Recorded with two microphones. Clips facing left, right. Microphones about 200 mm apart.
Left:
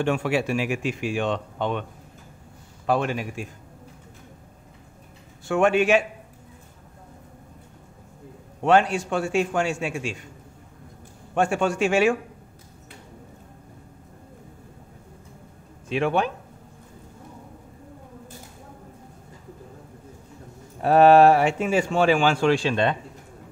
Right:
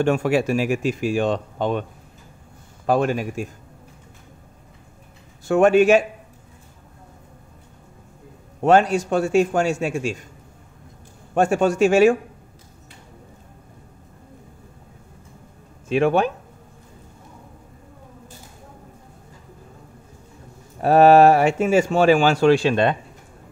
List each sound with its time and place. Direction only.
0.0 s speech: 45° right (ahead or behind)
2.9 s speech: 45° right (ahead or behind)
5.4 s speech: 40° right (ahead or behind)
8.6 s speech: 40° right (ahead or behind)
11.3 s speech: 40° right (ahead or behind)
15.9 s speech: 45° right (ahead or behind)
20.8 s speech: 40° right (ahead or behind)